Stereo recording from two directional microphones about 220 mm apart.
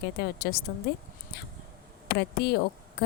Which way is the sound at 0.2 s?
45° left (ahead or behind).